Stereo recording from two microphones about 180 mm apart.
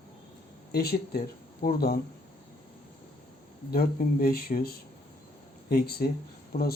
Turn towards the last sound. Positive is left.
turn(degrees=55)  # may be behind; listen again after turning